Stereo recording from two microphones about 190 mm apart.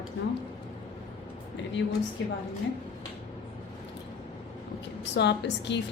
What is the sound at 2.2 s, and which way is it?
Speech, 70° left (ahead or behind).